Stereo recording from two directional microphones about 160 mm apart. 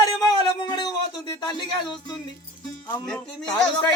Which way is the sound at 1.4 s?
30° left (ahead or behind).